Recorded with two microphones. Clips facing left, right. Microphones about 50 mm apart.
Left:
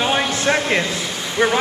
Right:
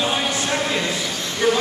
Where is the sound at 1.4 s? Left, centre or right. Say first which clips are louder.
Left 2 dB; centre.